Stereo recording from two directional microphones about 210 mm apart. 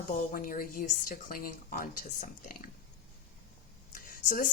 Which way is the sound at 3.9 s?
40° left (ahead or behind).